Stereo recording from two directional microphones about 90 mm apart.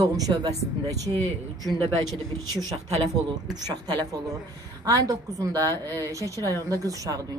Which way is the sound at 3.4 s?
45° right (ahead or behind).